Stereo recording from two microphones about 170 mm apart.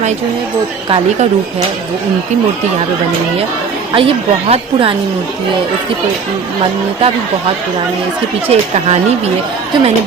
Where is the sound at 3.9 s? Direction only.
30° right (ahead or behind).